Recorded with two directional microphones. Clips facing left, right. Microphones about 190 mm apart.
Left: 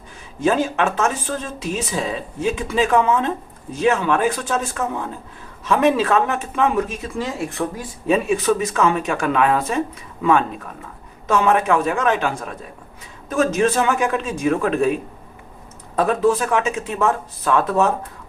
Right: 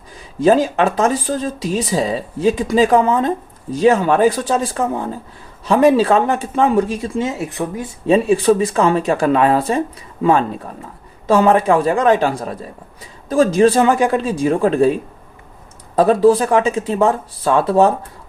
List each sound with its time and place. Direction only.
0.3 s speech: 35° right (ahead or behind); by 7.9 s 20° right (ahead or behind)
8.0 s speech: 30° right (ahead or behind)
16.0 s speech: 30° right (ahead or behind)